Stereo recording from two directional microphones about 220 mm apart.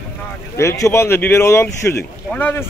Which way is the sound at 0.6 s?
15° left (ahead or behind).